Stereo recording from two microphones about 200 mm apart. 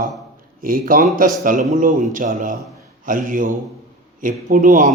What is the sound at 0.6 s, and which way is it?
A man's voice, 45° right (ahead or behind).